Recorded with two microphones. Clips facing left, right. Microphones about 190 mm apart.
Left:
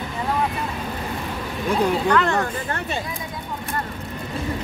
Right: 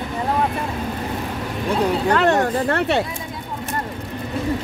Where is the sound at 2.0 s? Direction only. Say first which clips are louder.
Right 3 dB; 30° right (ahead or behind).